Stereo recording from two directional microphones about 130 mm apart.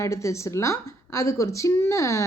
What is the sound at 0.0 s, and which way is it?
Speech, 25° left (ahead or behind).